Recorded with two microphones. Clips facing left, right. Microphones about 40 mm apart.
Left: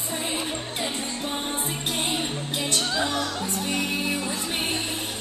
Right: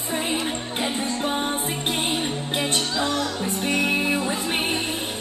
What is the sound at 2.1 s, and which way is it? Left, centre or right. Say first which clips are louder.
Music: right 3 dB; centre.